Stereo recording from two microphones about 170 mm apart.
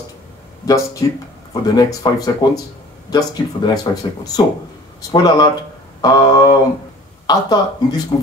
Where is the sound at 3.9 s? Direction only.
25° left (ahead or behind).